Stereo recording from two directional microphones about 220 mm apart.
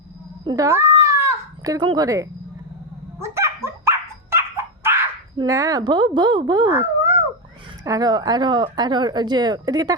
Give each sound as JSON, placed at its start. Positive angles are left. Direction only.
{"t": 0.4, "sound": "a sound", "side_deg": -15}
{"t": 3.2, "sound": "dog", "side_deg": -10}
{"t": 7.9, "sound": "speech", "side_deg": -15}